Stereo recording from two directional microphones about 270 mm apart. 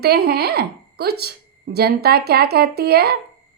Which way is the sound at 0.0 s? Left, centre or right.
Right.